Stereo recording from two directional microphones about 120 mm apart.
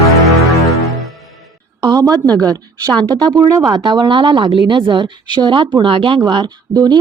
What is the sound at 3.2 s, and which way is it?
Speech, 30° right (ahead or behind).